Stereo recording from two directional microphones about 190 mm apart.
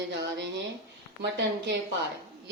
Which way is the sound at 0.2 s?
70° right (ahead or behind).